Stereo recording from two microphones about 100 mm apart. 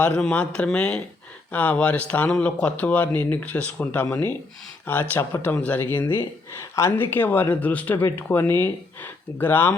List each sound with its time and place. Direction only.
0.2 s speech: 10° left (ahead or behind)